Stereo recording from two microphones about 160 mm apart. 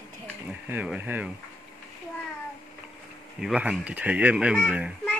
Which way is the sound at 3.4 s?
5° right (ahead or behind).